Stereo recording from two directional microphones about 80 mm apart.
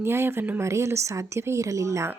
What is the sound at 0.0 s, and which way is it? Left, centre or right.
Speech, right.